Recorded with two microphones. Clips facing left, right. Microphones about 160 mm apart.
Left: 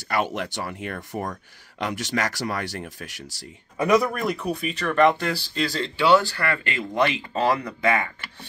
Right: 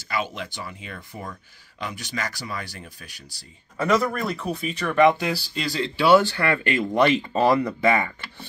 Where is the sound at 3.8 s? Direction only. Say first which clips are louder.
Left 2 dB; 15° left (ahead or behind).